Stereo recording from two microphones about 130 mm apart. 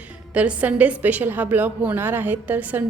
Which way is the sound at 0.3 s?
10° right (ahead or behind).